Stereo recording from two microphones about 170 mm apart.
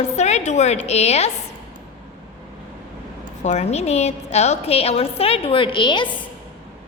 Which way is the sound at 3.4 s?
40° left (ahead or behind).